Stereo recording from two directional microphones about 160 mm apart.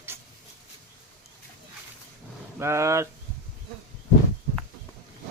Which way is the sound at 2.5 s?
15° right (ahead or behind).